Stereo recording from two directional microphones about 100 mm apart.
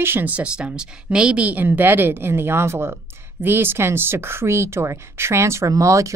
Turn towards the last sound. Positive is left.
turn(degrees=-30)  # may be behind; listen again after turning